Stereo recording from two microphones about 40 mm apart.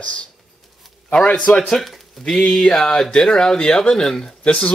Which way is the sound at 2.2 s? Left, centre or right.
Left.